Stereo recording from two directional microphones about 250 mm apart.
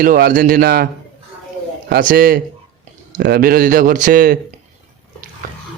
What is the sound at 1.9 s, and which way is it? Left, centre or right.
Speech, right.